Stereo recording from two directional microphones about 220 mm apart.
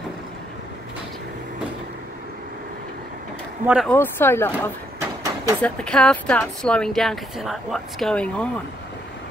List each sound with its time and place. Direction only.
3.6 s speech: 5° right (ahead or behind)
3.9 s speech: 10° left (ahead or behind)
5.2 s a sound: 15° right (ahead or behind)
5.6 s speech: 5° left (ahead or behind)